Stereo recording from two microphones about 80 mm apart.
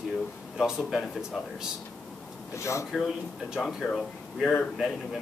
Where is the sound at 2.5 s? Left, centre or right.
Left.